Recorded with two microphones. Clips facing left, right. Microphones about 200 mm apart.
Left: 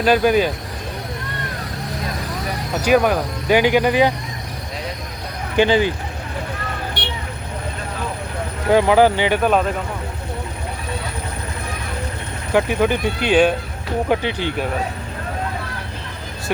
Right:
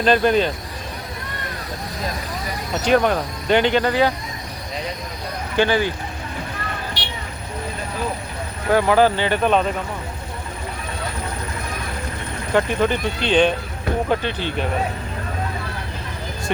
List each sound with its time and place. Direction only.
0.0 s speech: 5° left (ahead or behind)
2.8 s speech: 5° left (ahead or behind)
5.5 s speech: 15° left (ahead or behind)
8.7 s speech: 15° left (ahead or behind)
12.5 s speech: 10° left (ahead or behind)